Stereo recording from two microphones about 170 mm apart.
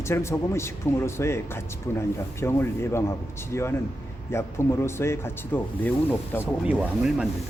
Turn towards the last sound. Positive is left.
turn(degrees=-5)  # may be behind; listen again after turning